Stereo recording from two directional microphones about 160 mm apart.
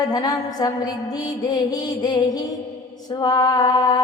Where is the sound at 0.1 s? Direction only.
25° left (ahead or behind).